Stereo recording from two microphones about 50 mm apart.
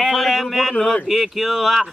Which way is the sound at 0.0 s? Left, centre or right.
Centre.